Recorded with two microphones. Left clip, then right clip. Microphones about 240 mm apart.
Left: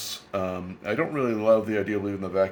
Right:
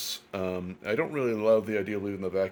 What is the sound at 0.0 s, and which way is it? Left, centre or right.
Speech, right.